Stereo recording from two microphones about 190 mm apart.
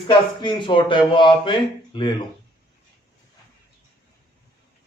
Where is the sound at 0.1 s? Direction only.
25° left (ahead or behind).